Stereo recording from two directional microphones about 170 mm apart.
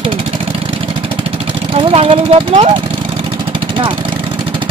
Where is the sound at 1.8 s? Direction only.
35° right (ahead or behind).